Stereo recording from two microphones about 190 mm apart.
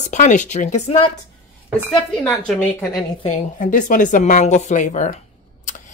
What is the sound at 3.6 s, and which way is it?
A woman's voice, 40° left (ahead or behind).